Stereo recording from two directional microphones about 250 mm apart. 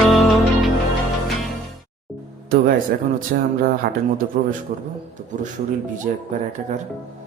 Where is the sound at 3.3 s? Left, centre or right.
Right.